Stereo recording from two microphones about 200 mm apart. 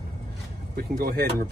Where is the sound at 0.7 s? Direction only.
50° right (ahead or behind).